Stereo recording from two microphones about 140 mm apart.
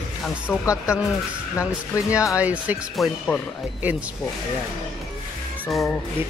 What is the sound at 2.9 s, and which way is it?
Speech, centre (ahead or behind).